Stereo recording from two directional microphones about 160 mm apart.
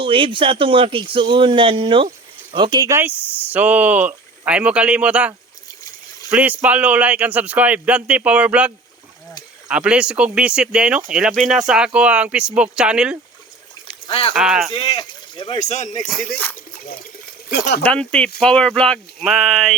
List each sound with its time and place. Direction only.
0.0 s speech: 35° right (ahead or behind)
3.0 s speech: 10° right (ahead or behind)
6.3 s speech: 10° right (ahead or behind)
14.1 s speech: 35° left (ahead or behind)
14.3 s speech: 5° right (ahead or behind)
14.7 s speech: 30° left (ahead or behind)
15.5 s speech: 45° left (ahead or behind)
16.0 s speech: 5° left (ahead or behind)
17.5 s speech: 85° left
17.8 s speech: 5° left (ahead or behind)